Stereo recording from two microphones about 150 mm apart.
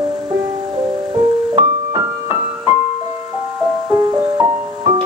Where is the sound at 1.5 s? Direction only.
25° right (ahead or behind).